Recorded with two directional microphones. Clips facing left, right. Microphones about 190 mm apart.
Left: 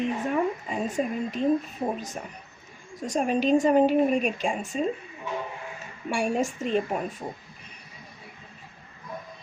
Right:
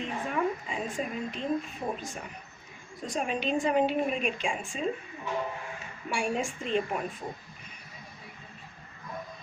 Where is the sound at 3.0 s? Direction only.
45° left (ahead or behind).